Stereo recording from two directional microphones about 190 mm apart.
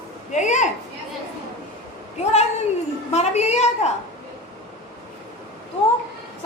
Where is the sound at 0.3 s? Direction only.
40° left (ahead or behind).